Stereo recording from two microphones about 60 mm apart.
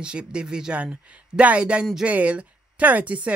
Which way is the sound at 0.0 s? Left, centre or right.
Centre.